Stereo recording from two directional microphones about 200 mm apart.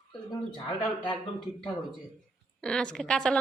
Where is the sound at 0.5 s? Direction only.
25° left (ahead or behind).